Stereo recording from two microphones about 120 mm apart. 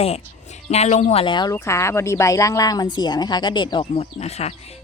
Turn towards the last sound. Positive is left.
turn(degrees=60)  # may be behind; listen again after turning